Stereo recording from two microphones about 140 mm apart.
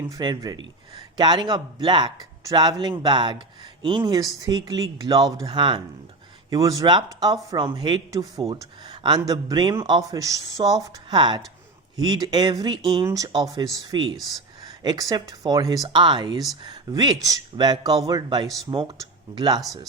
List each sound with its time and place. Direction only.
0.1 s speech: 30° right (ahead or behind)
6.5 s speech: 25° right (ahead or behind)
11.2 s speech: 35° right (ahead or behind)
13.1 s speech: 25° right (ahead or behind)
18.4 s speech: centre (ahead or behind)
18.7 s speech: 35° right (ahead or behind)